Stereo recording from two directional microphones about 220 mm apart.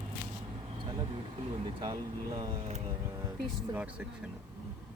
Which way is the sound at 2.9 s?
15° right (ahead or behind).